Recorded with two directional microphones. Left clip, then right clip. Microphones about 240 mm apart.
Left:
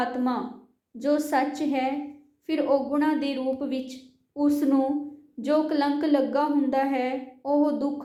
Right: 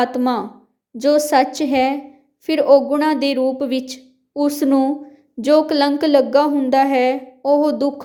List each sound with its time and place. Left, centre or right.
0.0 s a woman's voice: right